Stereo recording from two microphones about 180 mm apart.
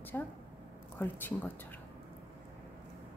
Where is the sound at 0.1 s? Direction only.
10° left (ahead or behind).